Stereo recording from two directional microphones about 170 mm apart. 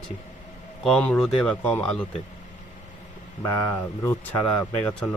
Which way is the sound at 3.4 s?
15° left (ahead or behind).